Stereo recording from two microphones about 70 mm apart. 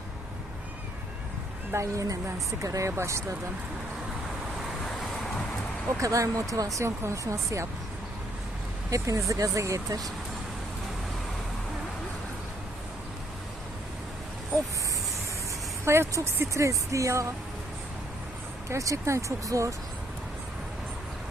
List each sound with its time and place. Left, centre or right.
1.7 s speech: right
6.0 s speech: right
8.9 s speech: right
15.8 s speech: right
18.7 s speech: right